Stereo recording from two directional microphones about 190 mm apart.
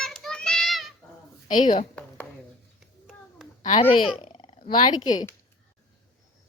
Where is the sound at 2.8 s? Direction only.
Centre (ahead or behind).